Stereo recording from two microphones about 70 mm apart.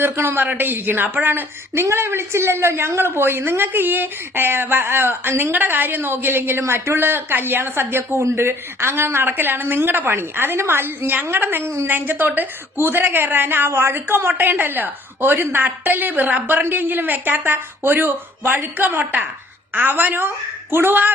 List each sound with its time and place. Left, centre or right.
0.0 s a woman's voice: right